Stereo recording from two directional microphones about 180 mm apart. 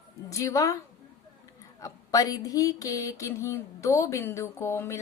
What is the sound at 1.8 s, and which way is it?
Speech, 20° left (ahead or behind).